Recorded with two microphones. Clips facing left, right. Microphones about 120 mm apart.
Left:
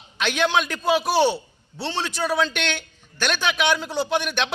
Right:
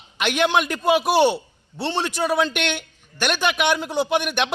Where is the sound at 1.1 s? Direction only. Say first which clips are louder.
Right 2 dB; 55° right (ahead or behind).